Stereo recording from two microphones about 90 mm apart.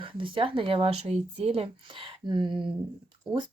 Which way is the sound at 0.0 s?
70° right (ahead or behind).